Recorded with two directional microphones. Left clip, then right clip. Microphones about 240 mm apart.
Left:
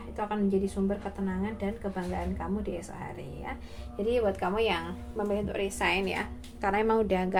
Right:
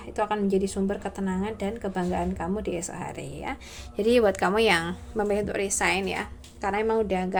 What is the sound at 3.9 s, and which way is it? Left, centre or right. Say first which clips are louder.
A woman's voice: right 6 dB; right.